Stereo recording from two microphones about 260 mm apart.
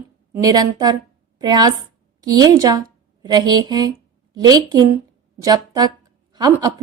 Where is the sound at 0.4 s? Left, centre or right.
Centre.